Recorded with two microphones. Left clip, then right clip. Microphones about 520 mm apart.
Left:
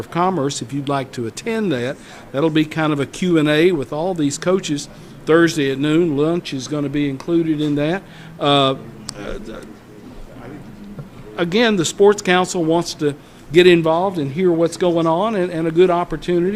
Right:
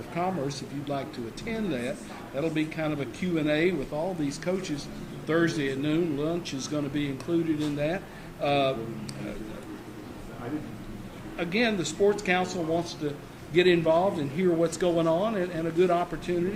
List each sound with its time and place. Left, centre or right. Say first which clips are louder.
0.1 s speech: left 11 dB; left
11.3 s speech: left 11 dB; left